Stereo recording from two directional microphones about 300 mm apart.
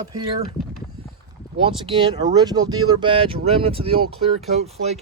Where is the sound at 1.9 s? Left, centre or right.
Centre.